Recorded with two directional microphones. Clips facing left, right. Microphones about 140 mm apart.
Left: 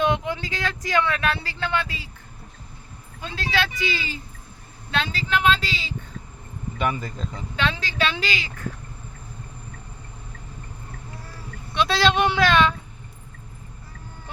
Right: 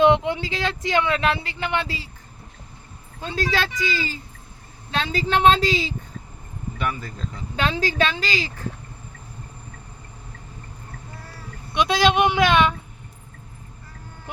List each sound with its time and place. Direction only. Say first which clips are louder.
0.0 s speech: right 6 dB; 25° right (ahead or behind)
3.2 s a woman's voice: right 2 dB; 35° right (ahead or behind)
6.7 s speech: left 3 dB; 20° left (ahead or behind)
7.5 s a woman's voice: right 4 dB; 35° right (ahead or behind)
11.7 s speech: right 2 dB; 15° right (ahead or behind)